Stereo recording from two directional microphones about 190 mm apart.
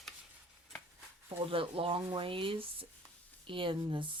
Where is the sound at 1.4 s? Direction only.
30° right (ahead or behind).